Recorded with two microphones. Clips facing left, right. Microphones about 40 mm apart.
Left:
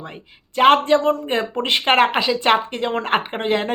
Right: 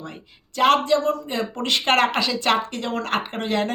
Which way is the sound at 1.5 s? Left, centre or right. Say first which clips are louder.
Left 3 dB; left.